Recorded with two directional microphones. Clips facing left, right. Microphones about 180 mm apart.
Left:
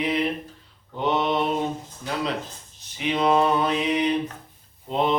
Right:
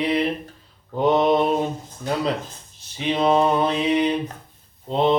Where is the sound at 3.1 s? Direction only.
25° right (ahead or behind).